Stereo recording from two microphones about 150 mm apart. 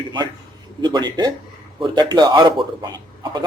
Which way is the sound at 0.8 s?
30° right (ahead or behind).